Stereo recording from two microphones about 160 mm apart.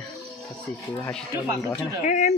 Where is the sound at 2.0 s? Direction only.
50° left (ahead or behind).